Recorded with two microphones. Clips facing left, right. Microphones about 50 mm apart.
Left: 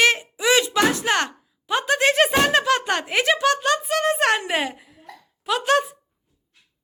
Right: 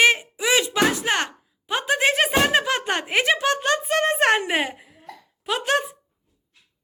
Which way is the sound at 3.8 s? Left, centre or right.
Right.